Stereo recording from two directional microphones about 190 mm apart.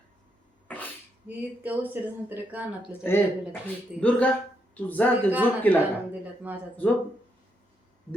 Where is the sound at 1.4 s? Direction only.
10° right (ahead or behind).